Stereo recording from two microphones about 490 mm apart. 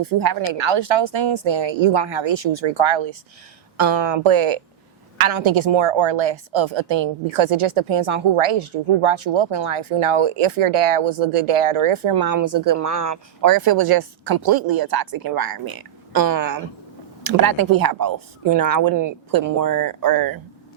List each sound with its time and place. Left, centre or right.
0.0 s a woman's voice: right
4.2 s a woman's voice: right
12.1 s speech: right
13.4 s speech: right